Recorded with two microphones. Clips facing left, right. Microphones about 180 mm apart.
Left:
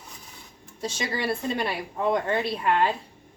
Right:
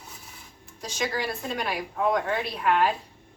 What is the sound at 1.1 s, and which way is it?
Speech, 30° left (ahead or behind).